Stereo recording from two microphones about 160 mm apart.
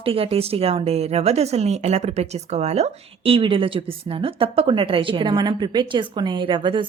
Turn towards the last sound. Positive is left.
turn(degrees=-30)  # may be behind; listen again after turning